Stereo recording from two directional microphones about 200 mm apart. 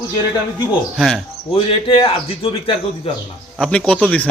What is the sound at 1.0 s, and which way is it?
Speech, centre (ahead or behind).